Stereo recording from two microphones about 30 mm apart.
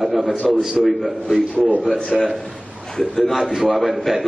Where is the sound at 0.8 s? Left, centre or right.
Centre.